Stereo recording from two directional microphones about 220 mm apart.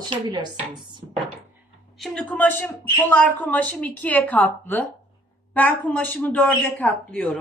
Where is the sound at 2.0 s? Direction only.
5° left (ahead or behind).